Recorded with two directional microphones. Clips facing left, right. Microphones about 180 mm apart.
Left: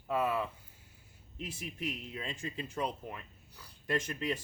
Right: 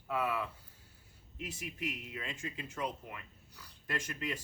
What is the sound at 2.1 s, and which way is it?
Speech, 30° left (ahead or behind).